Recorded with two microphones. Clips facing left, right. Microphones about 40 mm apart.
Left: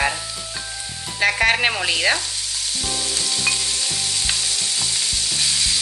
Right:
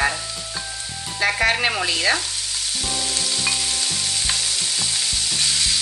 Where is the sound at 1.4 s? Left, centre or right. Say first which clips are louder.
Left 1 dB; left.